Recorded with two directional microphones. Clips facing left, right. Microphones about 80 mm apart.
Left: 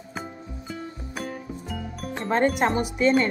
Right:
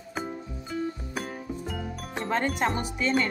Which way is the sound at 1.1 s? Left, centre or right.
Centre.